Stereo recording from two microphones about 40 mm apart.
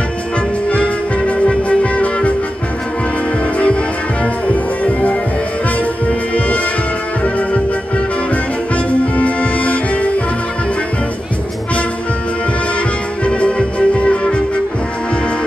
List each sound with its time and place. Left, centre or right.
0.7 s music: left
3.5 s music: left
8.7 s music: left
13.2 s music: left